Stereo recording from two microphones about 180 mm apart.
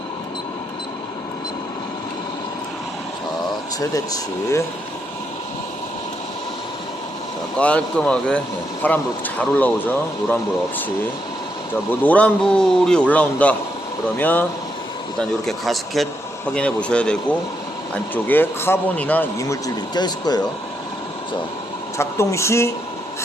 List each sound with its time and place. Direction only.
3.8 s speech: 20° left (ahead or behind)
7.6 s a man's voice: 5° left (ahead or behind)
15.4 s a man's voice: centre (ahead or behind); by 20.5 s 25° left (ahead or behind)
21.9 s a man's voice: 15° left (ahead or behind)